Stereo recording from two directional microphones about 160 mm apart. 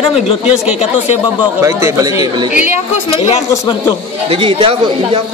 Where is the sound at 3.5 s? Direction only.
25° left (ahead or behind).